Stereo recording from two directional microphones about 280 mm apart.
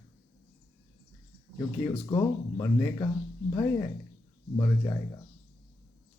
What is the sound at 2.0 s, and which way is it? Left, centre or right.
Speech, centre.